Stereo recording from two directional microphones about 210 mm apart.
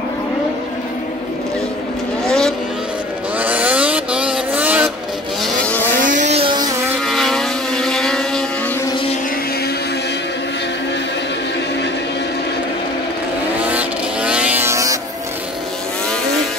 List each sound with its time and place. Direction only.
2.2 s vehicle: 5° left (ahead or behind)
3.3 s vehicle: 5° right (ahead or behind)
5.4 s vehicle: 5° left (ahead or behind)
5.9 s vehicle: 40° right (ahead or behind); by 7.0 s 15° right (ahead or behind)
7.1 s vehicle: centre (ahead or behind)
13.7 s vehicle: 5° right (ahead or behind)